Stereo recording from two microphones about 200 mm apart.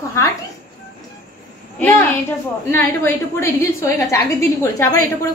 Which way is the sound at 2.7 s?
10° left (ahead or behind).